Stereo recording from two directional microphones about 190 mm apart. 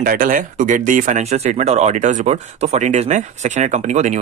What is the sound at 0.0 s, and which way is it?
Speech, 45° right (ahead or behind).